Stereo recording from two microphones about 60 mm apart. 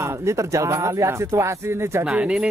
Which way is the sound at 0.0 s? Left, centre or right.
Right.